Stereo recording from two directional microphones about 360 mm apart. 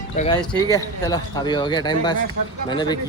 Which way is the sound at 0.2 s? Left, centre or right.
Left.